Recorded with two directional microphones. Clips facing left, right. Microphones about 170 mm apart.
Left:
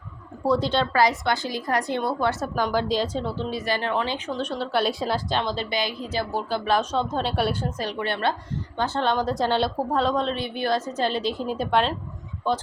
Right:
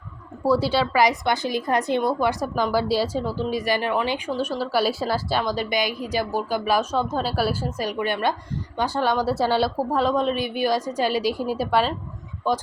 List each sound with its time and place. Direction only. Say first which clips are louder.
0.4 s speech: right 2 dB; 5° right (ahead or behind)
1.0 s a woman's voice: right 2 dB; 20° right (ahead or behind)
2.6 s speech: right 2 dB; 10° right (ahead or behind)